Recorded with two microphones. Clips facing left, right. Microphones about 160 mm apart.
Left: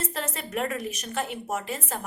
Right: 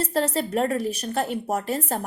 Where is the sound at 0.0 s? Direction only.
35° right (ahead or behind).